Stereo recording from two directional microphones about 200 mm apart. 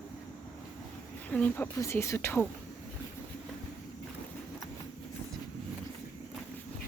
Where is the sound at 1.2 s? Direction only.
5° left (ahead or behind).